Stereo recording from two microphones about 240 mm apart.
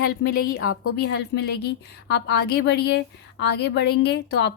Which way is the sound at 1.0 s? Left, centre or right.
Left.